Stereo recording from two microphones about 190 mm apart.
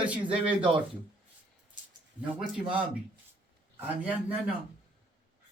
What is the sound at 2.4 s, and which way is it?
Speech, 5° right (ahead or behind).